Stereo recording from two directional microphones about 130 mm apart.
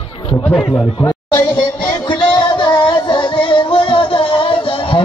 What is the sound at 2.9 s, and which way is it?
Music, 40° left (ahead or behind).